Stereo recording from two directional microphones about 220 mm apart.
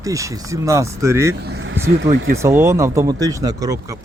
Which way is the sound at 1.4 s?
50° right (ahead or behind).